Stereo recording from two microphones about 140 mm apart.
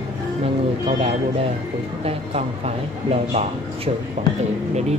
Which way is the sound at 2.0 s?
45° right (ahead or behind).